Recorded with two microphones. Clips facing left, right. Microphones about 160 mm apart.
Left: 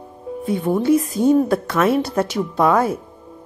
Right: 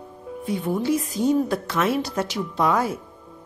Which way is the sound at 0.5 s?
60° left (ahead or behind).